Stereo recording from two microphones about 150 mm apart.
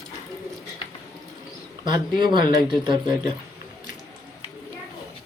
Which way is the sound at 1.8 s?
30° right (ahead or behind).